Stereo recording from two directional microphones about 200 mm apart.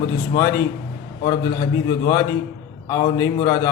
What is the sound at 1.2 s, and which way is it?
A man's voice, 20° left (ahead or behind).